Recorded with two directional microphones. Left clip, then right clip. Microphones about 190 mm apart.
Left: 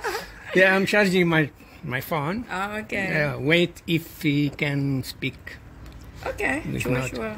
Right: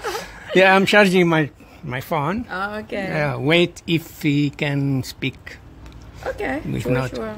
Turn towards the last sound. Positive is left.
turn(degrees=-15)  # may be behind; listen again after turning